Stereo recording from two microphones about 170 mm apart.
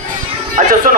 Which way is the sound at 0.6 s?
45° right (ahead or behind).